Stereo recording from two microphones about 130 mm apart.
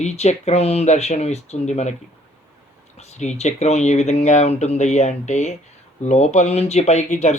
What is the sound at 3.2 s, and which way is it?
Speech, 60° left (ahead or behind).